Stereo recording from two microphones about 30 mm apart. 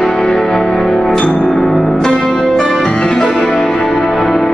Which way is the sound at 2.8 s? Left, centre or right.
Left.